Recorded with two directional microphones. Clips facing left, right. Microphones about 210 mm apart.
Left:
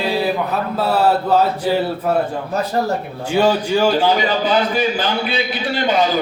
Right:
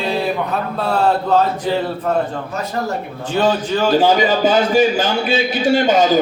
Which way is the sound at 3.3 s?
10° left (ahead or behind).